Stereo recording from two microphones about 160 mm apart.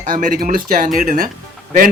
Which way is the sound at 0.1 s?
60° right (ahead or behind).